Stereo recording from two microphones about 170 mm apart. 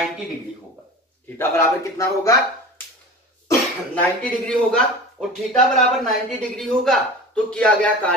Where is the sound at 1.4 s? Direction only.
15° left (ahead or behind).